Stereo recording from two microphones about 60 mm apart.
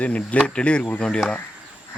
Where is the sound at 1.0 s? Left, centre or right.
Centre.